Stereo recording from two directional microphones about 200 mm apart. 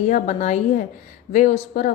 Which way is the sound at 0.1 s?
35° left (ahead or behind).